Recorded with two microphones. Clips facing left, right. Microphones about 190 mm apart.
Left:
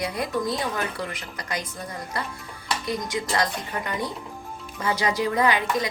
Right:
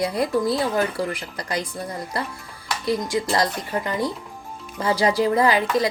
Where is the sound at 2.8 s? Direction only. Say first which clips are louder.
Right 7 dB; 35° right (ahead or behind).